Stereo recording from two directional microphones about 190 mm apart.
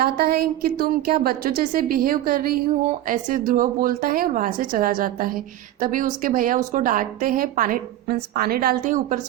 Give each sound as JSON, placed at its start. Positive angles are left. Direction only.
{"t": 0.0, "sound": "a woman's voice", "side_deg": -55}